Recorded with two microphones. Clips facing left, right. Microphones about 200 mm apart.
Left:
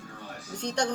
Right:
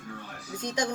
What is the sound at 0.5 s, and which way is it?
Speech, 65° left (ahead or behind).